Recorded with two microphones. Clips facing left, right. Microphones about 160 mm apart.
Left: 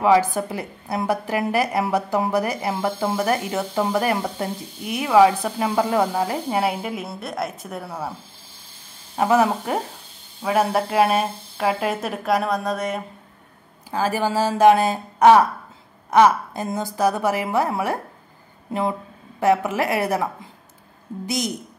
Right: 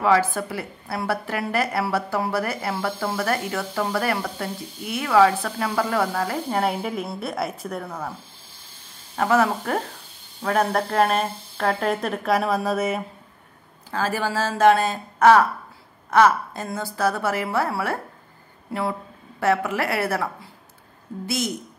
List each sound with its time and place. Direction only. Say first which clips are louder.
0.0 s a woman's voice: left 3 dB; 15° left (ahead or behind)
6.6 s a woman's voice: even; 5° left (ahead or behind)
9.1 s a woman's voice: left 2 dB; 15° left (ahead or behind); by 13.0 s 5° right (ahead or behind)
13.8 s a woman's voice: left 3 dB; 15° left (ahead or behind)